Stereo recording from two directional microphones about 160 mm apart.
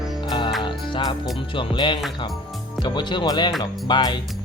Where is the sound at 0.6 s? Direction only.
30° left (ahead or behind).